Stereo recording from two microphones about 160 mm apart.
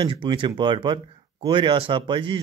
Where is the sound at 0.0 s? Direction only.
30° right (ahead or behind).